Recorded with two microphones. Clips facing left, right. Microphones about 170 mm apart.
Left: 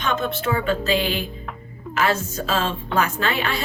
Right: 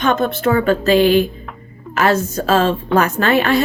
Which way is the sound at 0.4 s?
60° right (ahead or behind).